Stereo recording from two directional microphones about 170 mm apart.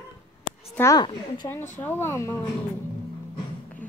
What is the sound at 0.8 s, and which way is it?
Speech, 15° left (ahead or behind).